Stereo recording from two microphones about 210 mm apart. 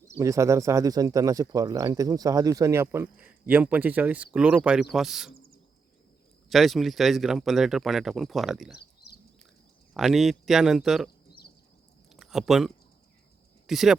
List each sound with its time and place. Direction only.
0.2 s speech: 15° right (ahead or behind)
6.5 s speech: centre (ahead or behind)
8.7 s a sound: 50° left (ahead or behind)
9.9 s speech: centre (ahead or behind)
12.1 s a sound: centre (ahead or behind)
13.7 s speech: centre (ahead or behind)